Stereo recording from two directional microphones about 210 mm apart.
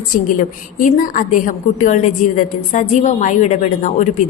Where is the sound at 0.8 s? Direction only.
40° left (ahead or behind).